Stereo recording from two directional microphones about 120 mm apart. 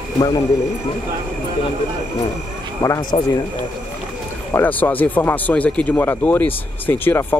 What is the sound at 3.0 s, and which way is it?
Speech, 35° left (ahead or behind).